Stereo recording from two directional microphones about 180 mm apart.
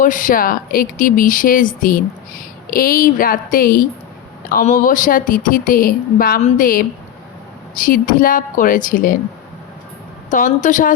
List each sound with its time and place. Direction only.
0.0 s speech: 50° left (ahead or behind)
10.2 s speech: 45° left (ahead or behind)